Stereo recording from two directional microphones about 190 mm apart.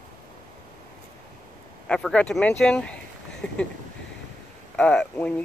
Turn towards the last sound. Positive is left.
turn(degrees=5)  # may be behind; listen again after turning